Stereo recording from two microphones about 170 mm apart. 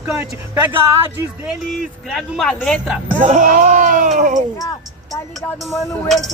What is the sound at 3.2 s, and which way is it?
Speech, 45° right (ahead or behind).